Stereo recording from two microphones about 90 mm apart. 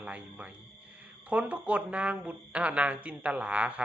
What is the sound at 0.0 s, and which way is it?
Speech, 15° right (ahead or behind).